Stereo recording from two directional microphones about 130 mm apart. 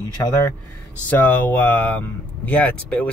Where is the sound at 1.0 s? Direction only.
15° left (ahead or behind).